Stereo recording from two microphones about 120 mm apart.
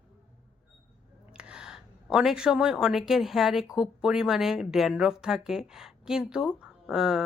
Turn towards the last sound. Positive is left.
turn(degrees=-5)  # may be behind; listen again after turning